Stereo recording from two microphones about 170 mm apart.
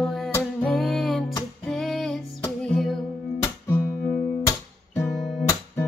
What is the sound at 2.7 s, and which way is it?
Music, centre (ahead or behind).